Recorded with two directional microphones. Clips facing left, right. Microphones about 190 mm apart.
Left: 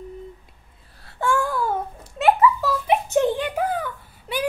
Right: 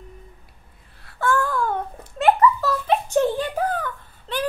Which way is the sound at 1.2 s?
10° left (ahead or behind).